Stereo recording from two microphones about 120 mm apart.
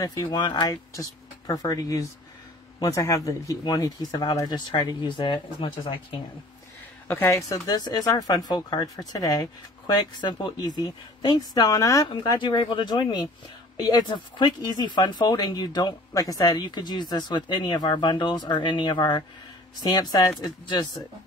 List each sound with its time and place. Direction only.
0.0 s speech: 30° left (ahead or behind)
7.1 s speech: 20° left (ahead or behind)
12.1 s speech: 40° left (ahead or behind)